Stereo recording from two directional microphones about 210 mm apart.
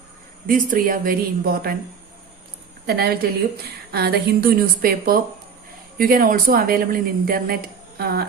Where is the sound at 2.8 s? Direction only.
50° right (ahead or behind).